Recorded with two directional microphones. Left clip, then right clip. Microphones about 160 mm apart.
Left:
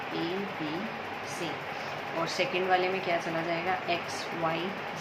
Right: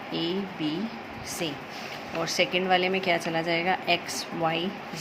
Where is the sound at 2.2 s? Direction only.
70° right (ahead or behind).